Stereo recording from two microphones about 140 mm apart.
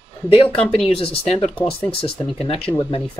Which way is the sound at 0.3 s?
45° left (ahead or behind).